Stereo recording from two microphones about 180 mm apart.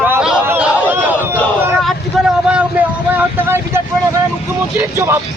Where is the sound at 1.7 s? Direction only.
Centre (ahead or behind).